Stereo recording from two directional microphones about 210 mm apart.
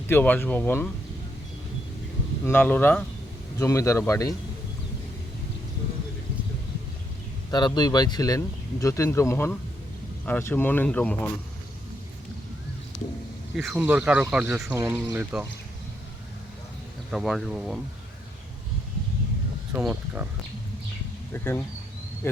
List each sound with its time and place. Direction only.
0.1 s speech: 10° left (ahead or behind)
2.4 s speech: 10° left (ahead or behind)
7.5 s speech: 20° left (ahead or behind)
13.6 s speech: 5° right (ahead or behind)
17.1 s speech: centre (ahead or behind)
19.7 s speech: 10° right (ahead or behind)
21.3 s speech: 10° left (ahead or behind)